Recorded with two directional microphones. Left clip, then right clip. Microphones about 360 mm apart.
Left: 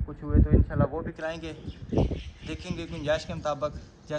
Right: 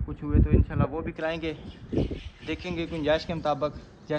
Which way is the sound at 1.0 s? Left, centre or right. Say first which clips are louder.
Right 4 dB; centre.